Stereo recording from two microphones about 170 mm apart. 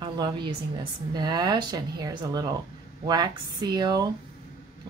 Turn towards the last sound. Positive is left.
turn(degrees=-25)  # may be behind; listen again after turning